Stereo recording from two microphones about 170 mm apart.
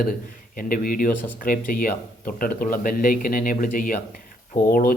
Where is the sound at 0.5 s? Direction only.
55° left (ahead or behind).